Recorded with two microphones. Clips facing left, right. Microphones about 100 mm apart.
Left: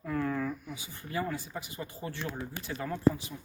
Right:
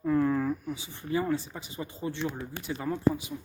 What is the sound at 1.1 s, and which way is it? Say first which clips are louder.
Speech: right 5 dB; 25° right (ahead or behind).